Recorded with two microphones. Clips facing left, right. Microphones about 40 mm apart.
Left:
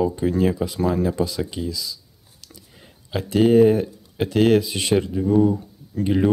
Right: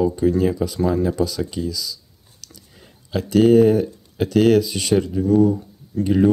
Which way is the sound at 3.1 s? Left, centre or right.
Left.